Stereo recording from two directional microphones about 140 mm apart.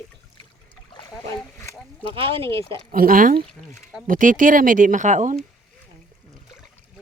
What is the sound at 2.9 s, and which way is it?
Speech, 85° right.